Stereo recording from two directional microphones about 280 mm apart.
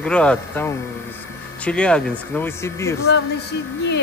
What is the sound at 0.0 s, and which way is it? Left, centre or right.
Speech, centre.